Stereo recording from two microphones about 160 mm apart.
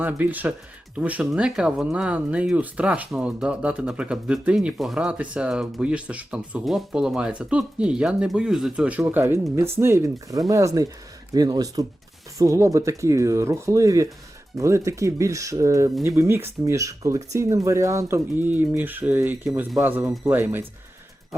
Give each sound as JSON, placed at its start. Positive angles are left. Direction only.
{"t": 0.0, "sound": "speech", "side_deg": -10}
{"t": 19.5, "sound": "speech", "side_deg": 0}
{"t": 19.8, "sound": "speech", "side_deg": -15}